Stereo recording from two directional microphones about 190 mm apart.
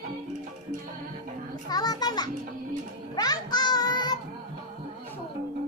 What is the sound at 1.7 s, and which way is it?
Children playing, 20° left (ahead or behind).